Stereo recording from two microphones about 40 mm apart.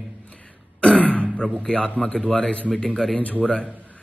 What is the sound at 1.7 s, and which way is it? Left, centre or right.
Speech, left.